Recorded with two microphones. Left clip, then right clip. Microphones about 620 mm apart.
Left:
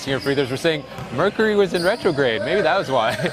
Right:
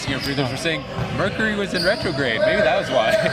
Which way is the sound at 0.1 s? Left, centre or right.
Left.